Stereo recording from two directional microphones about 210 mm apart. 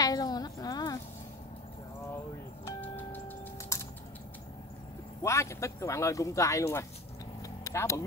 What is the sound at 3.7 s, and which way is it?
Typing, 15° left (ahead or behind).